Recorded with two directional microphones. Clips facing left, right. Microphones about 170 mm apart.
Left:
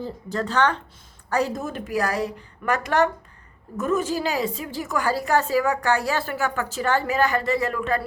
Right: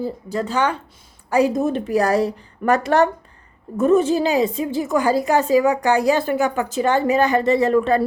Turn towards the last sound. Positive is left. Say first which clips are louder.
# right 8 dB
turn(degrees=-30)  # may be behind; listen again after turning